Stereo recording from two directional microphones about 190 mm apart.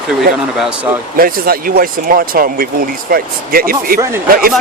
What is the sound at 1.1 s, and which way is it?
Speech, 50° right (ahead or behind).